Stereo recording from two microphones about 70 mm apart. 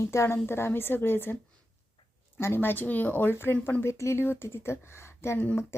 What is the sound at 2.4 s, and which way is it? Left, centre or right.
A woman's voice, left.